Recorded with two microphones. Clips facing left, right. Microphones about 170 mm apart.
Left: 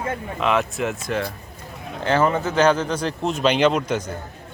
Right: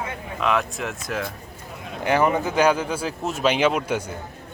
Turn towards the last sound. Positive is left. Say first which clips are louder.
# left 2 dB
turn(degrees=-10)  # may be behind; listen again after turning